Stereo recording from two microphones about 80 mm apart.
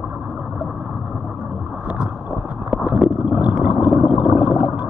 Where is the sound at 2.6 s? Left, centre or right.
Centre.